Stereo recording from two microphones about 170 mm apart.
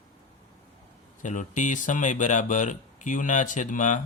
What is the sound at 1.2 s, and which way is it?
Speech, 50° left (ahead or behind).